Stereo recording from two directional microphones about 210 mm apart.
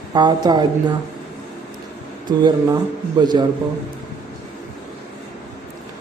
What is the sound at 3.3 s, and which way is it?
Speech, 20° right (ahead or behind).